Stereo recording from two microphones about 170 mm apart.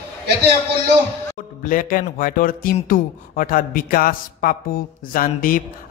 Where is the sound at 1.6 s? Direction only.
55° left (ahead or behind).